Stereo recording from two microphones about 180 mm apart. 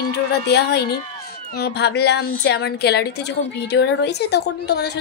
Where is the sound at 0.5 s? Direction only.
65° left (ahead or behind).